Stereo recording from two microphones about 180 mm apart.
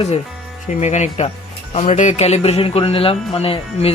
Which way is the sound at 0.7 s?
40° left (ahead or behind).